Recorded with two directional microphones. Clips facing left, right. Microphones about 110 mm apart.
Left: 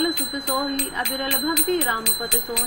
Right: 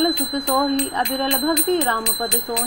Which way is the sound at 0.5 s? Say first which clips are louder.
Right 6 dB; 50° right (ahead or behind).